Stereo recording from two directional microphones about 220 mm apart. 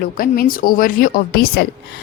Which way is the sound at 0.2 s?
40° left (ahead or behind).